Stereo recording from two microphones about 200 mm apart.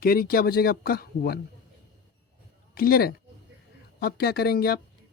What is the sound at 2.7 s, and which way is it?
Speech, 50° left (ahead or behind).